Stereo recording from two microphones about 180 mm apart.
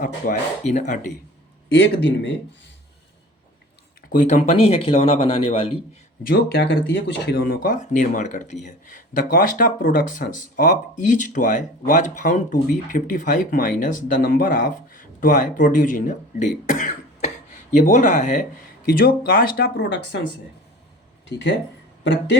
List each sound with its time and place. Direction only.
0.0 s speech: 45° left (ahead or behind)
1.7 s speech: 75° left (ahead or behind)
4.1 s speech: 45° left (ahead or behind)
6.2 s speech: 65° left (ahead or behind); by 18.3 s 40° left (ahead or behind)
18.9 s speech: 55° left (ahead or behind); by 20.2 s 80° left
21.2 s speech: 75° left (ahead or behind)